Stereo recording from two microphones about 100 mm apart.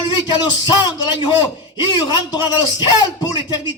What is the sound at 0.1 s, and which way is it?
A man's voice, 50° left (ahead or behind).